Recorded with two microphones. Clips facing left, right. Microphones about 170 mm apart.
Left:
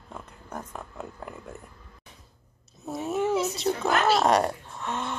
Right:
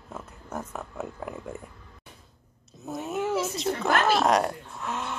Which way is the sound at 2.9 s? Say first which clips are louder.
Left 2 dB; centre (ahead or behind).